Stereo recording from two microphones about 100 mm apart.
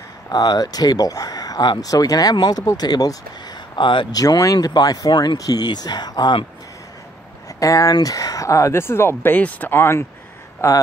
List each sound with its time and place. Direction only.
0.3 s speech: 40° left (ahead or behind)
3.7 s speech: 50° left (ahead or behind)
4.2 s speech: 35° left (ahead or behind)
7.4 s speech: 35° left (ahead or behind)